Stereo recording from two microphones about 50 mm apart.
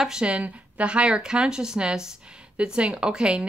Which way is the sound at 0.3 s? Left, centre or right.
Right.